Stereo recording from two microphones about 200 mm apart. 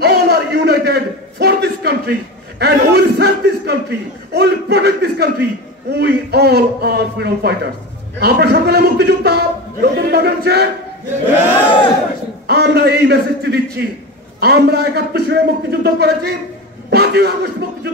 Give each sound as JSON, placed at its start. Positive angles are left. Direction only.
{"t": 0.0, "sound": "a sound", "side_deg": -55}
{"t": 2.6, "sound": "a man's voice", "side_deg": -55}
{"t": 12.4, "sound": "a man's voice", "side_deg": -55}
{"t": 16.9, "sound": "music", "side_deg": -55}